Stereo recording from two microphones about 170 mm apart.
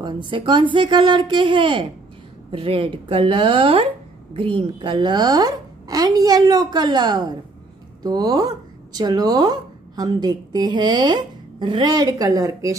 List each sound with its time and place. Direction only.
0.0 s speech: 25° right (ahead or behind)